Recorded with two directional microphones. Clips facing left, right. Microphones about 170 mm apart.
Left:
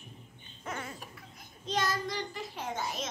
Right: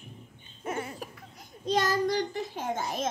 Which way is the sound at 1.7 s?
45° right (ahead or behind).